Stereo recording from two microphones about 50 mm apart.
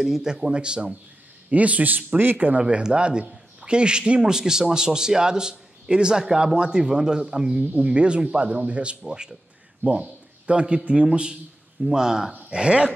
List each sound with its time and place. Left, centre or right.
0.0 s a man's voice: centre
1.5 s speech: right
2.3 s a man's voice: right
2.6 s a man's voice: centre